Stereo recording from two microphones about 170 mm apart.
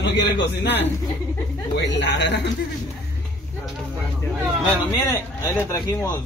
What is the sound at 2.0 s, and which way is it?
Speech, 90° left.